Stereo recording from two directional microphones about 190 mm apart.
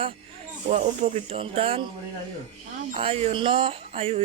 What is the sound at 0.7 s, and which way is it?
Speech, 35° right (ahead or behind).